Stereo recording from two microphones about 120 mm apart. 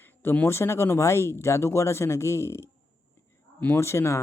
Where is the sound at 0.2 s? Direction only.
15° left (ahead or behind).